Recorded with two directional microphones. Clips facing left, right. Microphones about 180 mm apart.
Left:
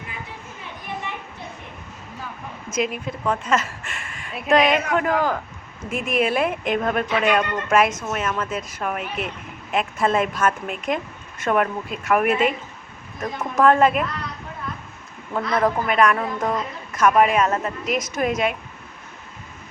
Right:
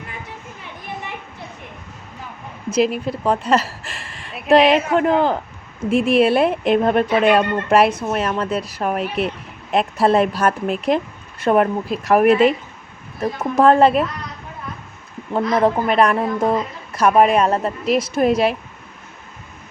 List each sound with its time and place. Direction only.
2.7 s a woman's voice: 35° right (ahead or behind)
15.3 s a woman's voice: 25° right (ahead or behind)